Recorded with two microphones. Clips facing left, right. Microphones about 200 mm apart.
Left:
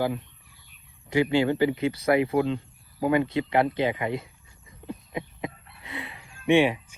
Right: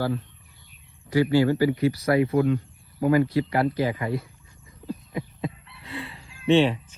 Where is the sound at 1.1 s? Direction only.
20° left (ahead or behind).